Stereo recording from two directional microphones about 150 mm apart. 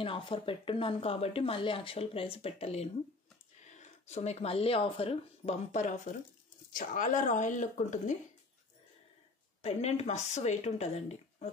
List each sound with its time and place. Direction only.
0.0 s speech: 35° left (ahead or behind); by 8.0 s 55° left (ahead or behind)
9.6 s speech: 45° left (ahead or behind)